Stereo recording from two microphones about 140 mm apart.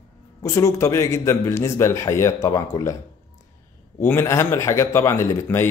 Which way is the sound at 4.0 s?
20° left (ahead or behind).